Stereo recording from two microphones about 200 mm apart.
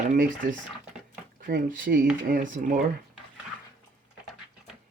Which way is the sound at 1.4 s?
45° right (ahead or behind).